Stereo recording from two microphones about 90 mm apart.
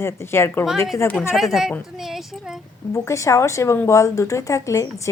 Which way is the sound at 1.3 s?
Centre (ahead or behind).